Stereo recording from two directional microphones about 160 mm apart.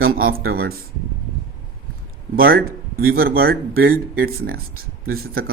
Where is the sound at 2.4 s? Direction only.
70° right (ahead or behind).